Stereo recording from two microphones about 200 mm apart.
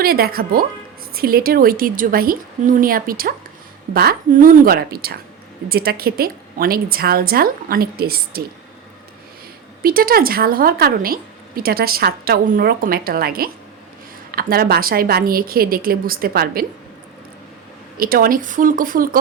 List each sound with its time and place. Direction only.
0.0 s a woman's voice: 50° right (ahead or behind)
9.8 s a woman's voice: 50° right (ahead or behind)
14.5 s a woman's voice: 50° right (ahead or behind)
17.9 s a woman's voice: 45° right (ahead or behind)